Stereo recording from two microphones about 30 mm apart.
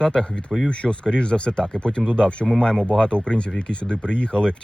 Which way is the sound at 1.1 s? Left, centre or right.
Left.